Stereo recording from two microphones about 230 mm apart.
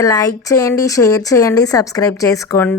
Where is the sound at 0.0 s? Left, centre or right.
Centre.